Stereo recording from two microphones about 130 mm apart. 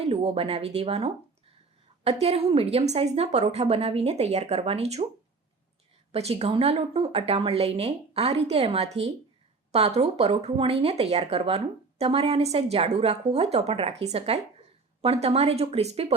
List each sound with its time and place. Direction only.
0.0 s speech: 50° right (ahead or behind)
6.1 s speech: 50° right (ahead or behind)